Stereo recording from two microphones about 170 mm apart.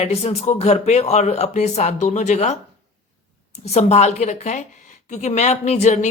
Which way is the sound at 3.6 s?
40° left (ahead or behind).